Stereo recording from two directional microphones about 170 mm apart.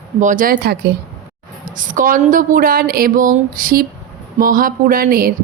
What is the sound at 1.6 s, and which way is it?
Speech, 50° right (ahead or behind).